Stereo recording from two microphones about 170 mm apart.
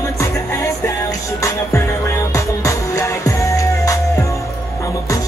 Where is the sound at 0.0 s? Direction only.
15° left (ahead or behind).